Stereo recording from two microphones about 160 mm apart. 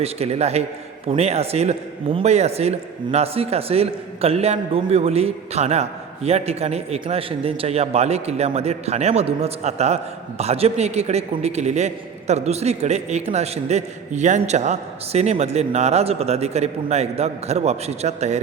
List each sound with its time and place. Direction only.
0.0 s a man's voice: 40° right (ahead or behind)